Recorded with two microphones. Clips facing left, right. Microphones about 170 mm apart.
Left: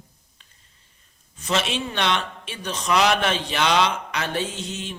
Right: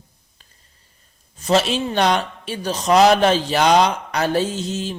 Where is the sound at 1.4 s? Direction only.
35° right (ahead or behind).